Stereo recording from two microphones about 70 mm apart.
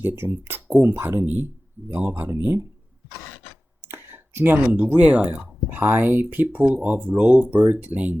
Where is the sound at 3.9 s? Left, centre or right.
Right.